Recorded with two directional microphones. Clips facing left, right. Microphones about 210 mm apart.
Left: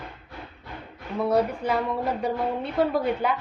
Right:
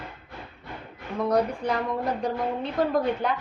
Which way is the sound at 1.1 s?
5° left (ahead or behind).